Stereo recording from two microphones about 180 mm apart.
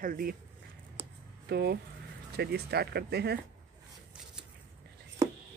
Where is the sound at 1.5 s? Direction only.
65° right (ahead or behind).